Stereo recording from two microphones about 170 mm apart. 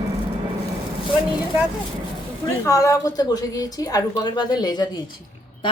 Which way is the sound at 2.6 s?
20° left (ahead or behind).